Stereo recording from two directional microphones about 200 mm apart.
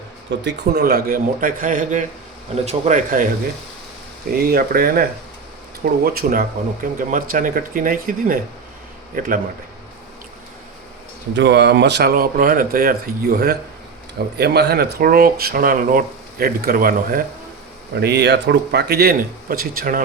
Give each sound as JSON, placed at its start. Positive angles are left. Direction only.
{"t": 0.3, "sound": "speech", "side_deg": -55}
{"t": 4.3, "sound": "speech", "side_deg": -50}
{"t": 11.3, "sound": "speech", "side_deg": -60}
{"t": 18.0, "sound": "speech", "side_deg": -55}